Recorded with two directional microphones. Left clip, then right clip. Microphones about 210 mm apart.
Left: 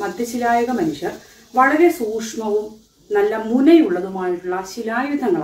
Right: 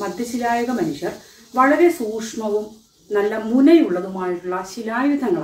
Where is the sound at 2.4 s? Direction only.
5° left (ahead or behind).